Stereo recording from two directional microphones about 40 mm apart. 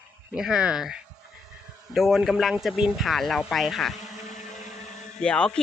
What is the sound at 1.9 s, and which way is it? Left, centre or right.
Speech, centre.